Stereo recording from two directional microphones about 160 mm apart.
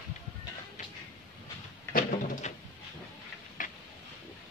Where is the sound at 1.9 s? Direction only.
50° left (ahead or behind).